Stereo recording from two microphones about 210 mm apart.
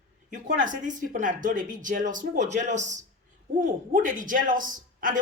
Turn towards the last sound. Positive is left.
turn(degrees=-40)  # may be behind; listen again after turning